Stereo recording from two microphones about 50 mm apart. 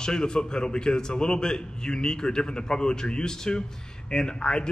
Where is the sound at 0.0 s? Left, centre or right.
Centre.